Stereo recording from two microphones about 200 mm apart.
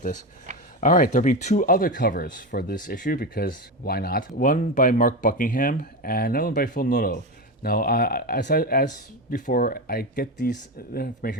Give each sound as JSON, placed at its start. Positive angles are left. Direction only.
{"t": 0.8, "sound": "speech", "side_deg": 40}